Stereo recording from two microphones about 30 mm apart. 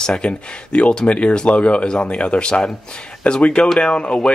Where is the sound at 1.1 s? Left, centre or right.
Left.